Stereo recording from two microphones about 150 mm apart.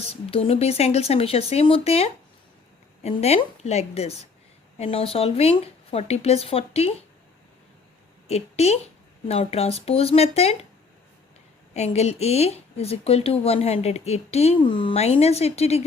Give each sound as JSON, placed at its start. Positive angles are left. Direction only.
{"t": 0.1, "sound": "speech", "side_deg": 40}
{"t": 8.3, "sound": "speech", "side_deg": 45}
{"t": 11.7, "sound": "speech", "side_deg": 45}